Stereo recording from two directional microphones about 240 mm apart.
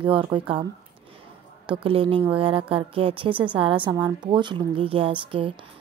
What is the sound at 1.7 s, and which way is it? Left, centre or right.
A woman's voice, right.